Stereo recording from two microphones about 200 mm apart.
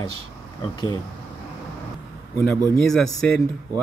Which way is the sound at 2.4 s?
10° left (ahead or behind).